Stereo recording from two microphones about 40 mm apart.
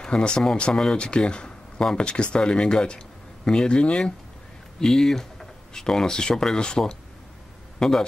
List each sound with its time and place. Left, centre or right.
0.0 s speech: left
4.7 s speech: centre
7.8 s a man's voice: centre